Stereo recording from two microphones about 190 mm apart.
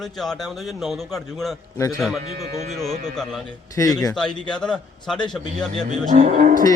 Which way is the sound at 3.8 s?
20° left (ahead or behind).